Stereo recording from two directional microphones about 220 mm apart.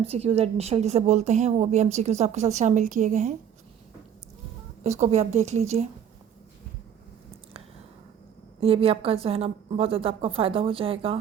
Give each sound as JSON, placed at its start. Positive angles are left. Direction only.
{"t": 0.0, "sound": "a woman's voice", "side_deg": -25}
{"t": 4.8, "sound": "a woman's voice", "side_deg": -30}
{"t": 8.6, "sound": "a woman's voice", "side_deg": -25}